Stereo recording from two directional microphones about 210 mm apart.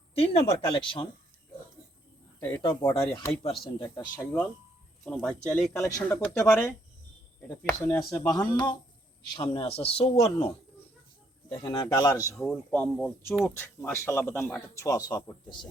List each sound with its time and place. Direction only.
0.1 s speech: 30° left (ahead or behind)
2.6 s speech: 20° left (ahead or behind)
4.2 s speech: 5° left (ahead or behind)
5.7 s speech: 15° left (ahead or behind)
8.5 s speech: 20° left (ahead or behind)
11.4 s speech: 20° left (ahead or behind)
12.4 s speech: 5° left (ahead or behind)